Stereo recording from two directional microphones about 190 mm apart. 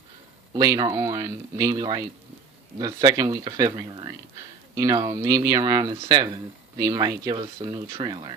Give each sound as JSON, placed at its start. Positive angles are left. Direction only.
{"t": 0.5, "sound": "speech", "side_deg": -20}